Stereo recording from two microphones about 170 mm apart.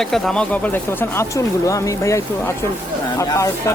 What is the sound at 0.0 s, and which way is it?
Speech, centre (ahead or behind).